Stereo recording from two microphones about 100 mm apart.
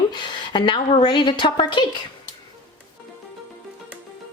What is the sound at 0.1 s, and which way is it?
A woman's voice, 50° left (ahead or behind).